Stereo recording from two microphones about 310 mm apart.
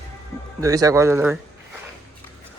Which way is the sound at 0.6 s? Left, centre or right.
Centre.